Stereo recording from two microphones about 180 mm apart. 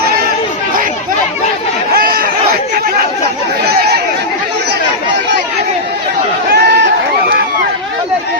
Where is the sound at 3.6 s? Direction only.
60° right (ahead or behind).